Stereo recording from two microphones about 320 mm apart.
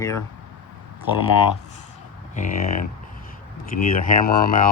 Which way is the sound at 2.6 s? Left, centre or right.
Left.